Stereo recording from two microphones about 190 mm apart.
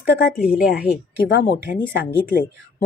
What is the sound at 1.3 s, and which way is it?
Speech, 55° left (ahead or behind).